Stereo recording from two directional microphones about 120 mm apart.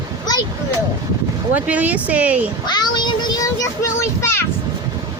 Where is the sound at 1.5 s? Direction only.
15° right (ahead or behind).